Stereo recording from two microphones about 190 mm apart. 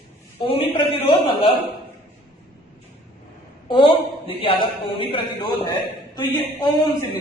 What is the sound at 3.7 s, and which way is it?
A man's voice, 25° left (ahead or behind).